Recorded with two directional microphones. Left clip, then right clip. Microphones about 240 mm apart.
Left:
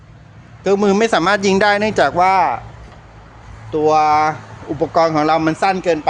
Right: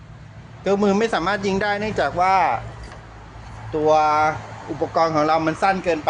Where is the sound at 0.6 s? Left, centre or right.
Left.